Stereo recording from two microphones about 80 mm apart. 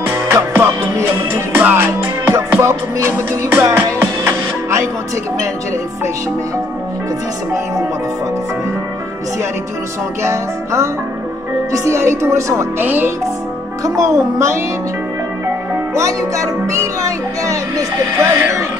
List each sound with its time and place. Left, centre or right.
0.0 s music: right
10.2 s speech: right
12.8 s music: right
13.8 s a child's voice: right
15.9 s speech: right